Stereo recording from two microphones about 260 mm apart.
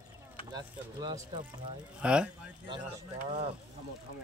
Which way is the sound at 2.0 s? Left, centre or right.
Centre.